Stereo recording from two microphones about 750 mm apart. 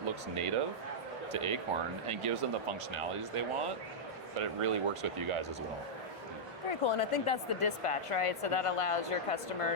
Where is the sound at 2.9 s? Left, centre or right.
Right.